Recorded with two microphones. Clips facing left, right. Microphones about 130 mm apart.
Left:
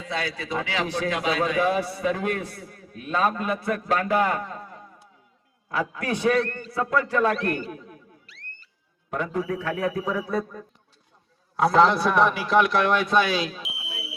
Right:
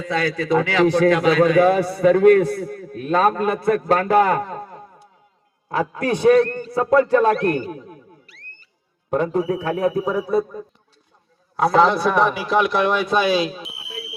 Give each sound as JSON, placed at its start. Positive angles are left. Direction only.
{"t": 0.0, "sound": "a man's voice", "side_deg": -50}
{"t": 7.3, "sound": "a man's voice", "side_deg": -40}
{"t": 9.0, "sound": "a man's voice", "side_deg": -30}
{"t": 10.2, "sound": "a man's voice", "side_deg": -15}
{"t": 11.5, "sound": "a man's voice", "side_deg": 0}